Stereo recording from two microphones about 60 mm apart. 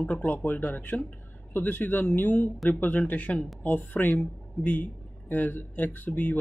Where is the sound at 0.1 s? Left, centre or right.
Left.